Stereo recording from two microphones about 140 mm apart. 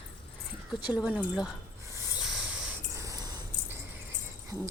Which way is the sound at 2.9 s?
25° right (ahead or behind).